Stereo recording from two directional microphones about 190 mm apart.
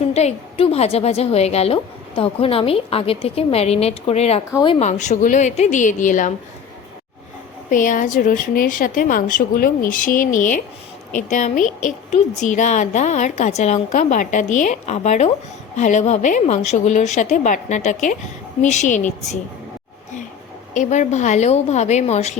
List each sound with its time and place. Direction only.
0.1 s a woman's voice: 35° left (ahead or behind)
4.9 s a woman's voice: 40° left (ahead or behind)
7.7 s a woman's voice: 45° left (ahead or behind)
20.7 s a woman's voice: 40° left (ahead or behind)